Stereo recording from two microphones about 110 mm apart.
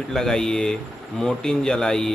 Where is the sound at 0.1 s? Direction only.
5° left (ahead or behind).